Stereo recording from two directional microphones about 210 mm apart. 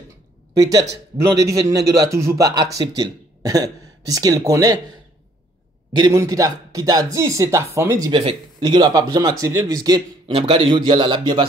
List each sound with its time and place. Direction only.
0.6 s a man's voice: 15° right (ahead or behind)
5.9 s a man's voice: 20° right (ahead or behind)